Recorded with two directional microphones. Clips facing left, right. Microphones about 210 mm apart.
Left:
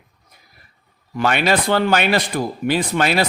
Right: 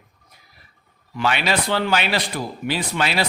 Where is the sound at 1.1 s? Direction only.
50° left (ahead or behind).